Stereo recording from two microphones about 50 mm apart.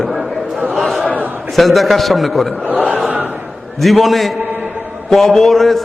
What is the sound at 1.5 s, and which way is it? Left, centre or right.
Speech, centre.